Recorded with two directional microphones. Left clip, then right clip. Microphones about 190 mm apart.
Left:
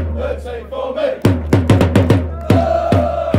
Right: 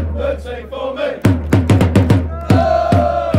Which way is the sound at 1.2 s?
15° left (ahead or behind).